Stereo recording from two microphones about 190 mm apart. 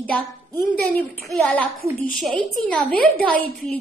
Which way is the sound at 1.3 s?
5° left (ahead or behind).